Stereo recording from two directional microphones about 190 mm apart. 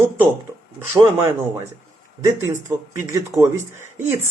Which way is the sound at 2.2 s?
15° right (ahead or behind).